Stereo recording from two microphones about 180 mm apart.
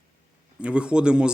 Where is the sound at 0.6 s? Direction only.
5° right (ahead or behind).